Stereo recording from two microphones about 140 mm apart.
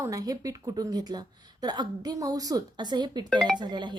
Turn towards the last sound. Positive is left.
turn(degrees=-35)  # may be behind; listen again after turning